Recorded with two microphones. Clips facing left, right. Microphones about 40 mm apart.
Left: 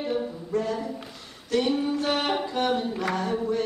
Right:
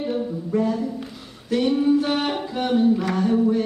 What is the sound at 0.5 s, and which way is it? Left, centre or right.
Music, centre.